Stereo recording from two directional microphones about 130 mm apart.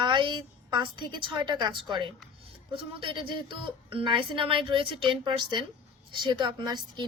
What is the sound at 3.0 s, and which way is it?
A woman's voice, 40° right (ahead or behind).